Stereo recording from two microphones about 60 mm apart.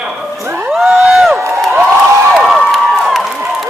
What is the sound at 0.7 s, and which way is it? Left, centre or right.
Crowd, centre.